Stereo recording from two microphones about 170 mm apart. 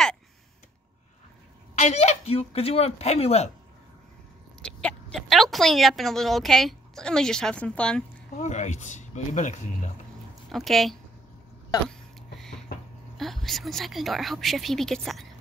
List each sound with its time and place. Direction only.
1.8 s speech: 40° left (ahead or behind)
4.6 s speech: 5° left (ahead or behind)
8.4 s speech: 45° left (ahead or behind)
10.5 s speech: centre (ahead or behind)
13.2 s speech: centre (ahead or behind)